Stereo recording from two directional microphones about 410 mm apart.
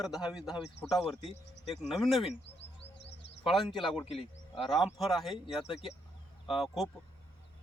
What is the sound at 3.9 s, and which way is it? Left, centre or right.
Speech, centre.